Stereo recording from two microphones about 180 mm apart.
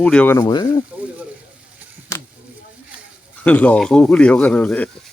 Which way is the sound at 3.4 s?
10° left (ahead or behind).